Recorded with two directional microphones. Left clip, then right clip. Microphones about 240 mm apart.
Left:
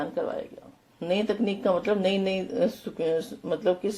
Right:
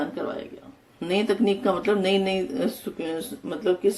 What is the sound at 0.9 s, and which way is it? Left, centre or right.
Speech, centre.